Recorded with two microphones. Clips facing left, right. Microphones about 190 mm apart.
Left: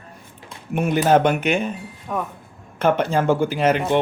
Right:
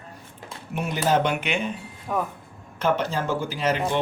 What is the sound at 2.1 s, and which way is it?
Speech, centre (ahead or behind).